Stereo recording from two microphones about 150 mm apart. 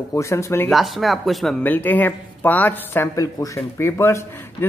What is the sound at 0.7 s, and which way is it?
Speech, centre (ahead or behind).